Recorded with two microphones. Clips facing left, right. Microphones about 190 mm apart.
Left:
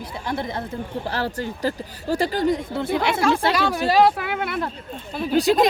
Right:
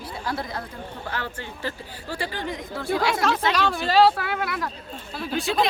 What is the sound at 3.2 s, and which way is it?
Speech, 10° left (ahead or behind).